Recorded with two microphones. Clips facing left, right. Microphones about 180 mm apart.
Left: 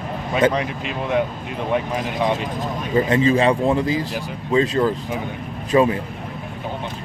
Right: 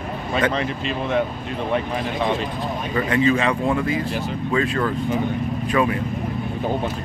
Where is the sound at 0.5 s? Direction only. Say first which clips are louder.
Even; 10° left (ahead or behind).